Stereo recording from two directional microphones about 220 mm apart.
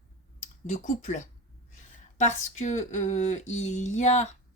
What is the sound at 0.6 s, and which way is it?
A woman's voice, 30° left (ahead or behind).